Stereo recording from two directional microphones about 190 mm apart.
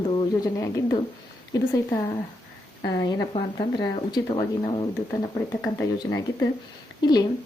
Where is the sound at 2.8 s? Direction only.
20° left (ahead or behind).